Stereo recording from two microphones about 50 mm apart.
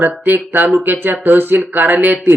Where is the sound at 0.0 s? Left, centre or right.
Right.